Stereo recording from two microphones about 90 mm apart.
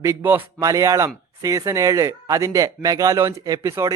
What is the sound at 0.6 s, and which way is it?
Speech, 40° right (ahead or behind).